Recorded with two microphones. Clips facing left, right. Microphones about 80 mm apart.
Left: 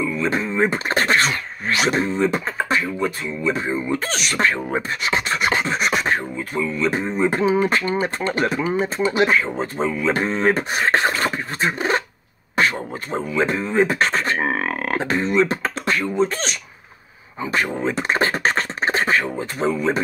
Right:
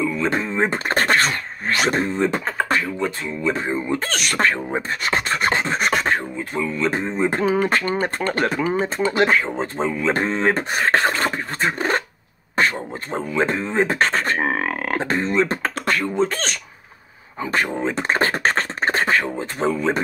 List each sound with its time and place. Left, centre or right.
0.0 s speech: right
4.8 s a sound: right
6.5 s speech: right
7.4 s speech: right